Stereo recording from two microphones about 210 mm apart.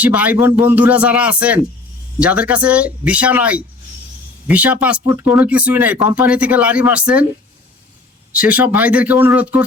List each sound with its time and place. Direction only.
0.0 s speech: 5° right (ahead or behind)
8.3 s speech: 5° right (ahead or behind)